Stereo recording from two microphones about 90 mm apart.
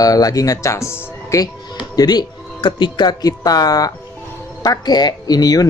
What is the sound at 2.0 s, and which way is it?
Speech, 50° left (ahead or behind).